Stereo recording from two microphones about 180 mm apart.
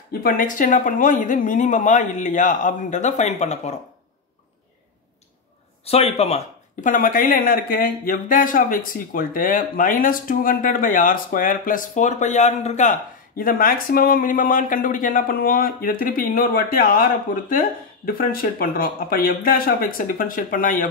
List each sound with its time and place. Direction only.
0.2 s speech: 50° left (ahead or behind)
5.9 s speech: 35° left (ahead or behind)